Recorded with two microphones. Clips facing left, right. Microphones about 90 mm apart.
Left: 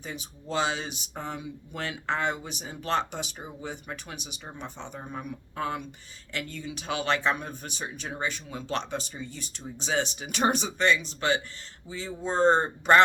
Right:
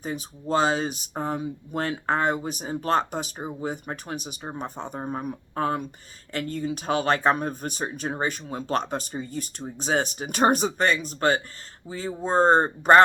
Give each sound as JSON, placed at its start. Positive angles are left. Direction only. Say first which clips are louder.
{"t": 0.0, "sound": "speech", "louder": "right 7 dB", "side_deg": -40}